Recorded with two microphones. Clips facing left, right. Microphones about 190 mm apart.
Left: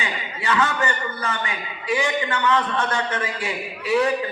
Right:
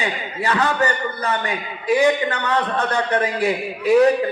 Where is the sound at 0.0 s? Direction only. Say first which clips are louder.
Right 4 dB; 35° right (ahead or behind).